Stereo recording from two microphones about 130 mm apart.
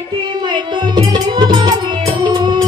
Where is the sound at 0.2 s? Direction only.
35° right (ahead or behind).